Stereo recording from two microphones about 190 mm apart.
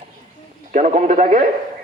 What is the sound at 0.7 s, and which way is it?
Speech, 40° right (ahead or behind).